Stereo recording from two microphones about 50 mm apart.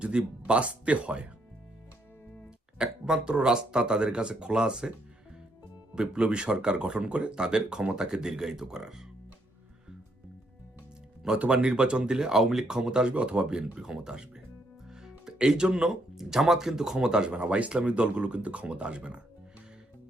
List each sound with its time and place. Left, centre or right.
0.0 s speech: right
2.7 s speech: centre
11.3 s speech: right